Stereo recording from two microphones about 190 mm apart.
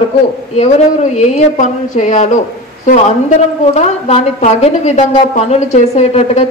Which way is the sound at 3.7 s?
35° left (ahead or behind).